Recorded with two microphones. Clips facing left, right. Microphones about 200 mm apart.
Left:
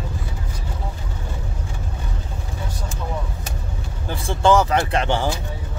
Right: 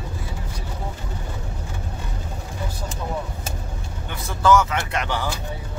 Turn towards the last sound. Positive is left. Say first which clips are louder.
# left 5 dB
turn(degrees=30)  # may be behind; listen again after turning